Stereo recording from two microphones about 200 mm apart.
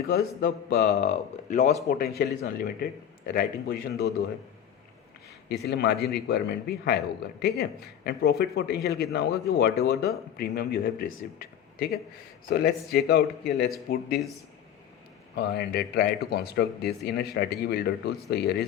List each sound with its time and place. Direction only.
0.1 s a man's voice: 50° left (ahead or behind)
0.9 s speech: 35° left (ahead or behind)
1.9 s a man's voice: 50° left (ahead or behind)
5.5 s a man's voice: 55° left (ahead or behind)
15.4 s a man's voice: 55° left (ahead or behind)